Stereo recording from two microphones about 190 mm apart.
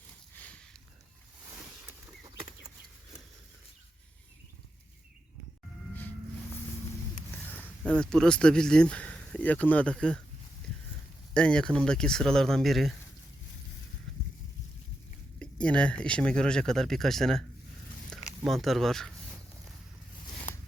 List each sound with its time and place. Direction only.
0.3 s a sound: 5° left (ahead or behind)
2.2 s chicken: 20° right (ahead or behind)
7.5 s speech: 5° left (ahead or behind)
11.3 s speech: 5° left (ahead or behind)
15.4 s speech: 5° left (ahead or behind)
18.4 s speech: centre (ahead or behind)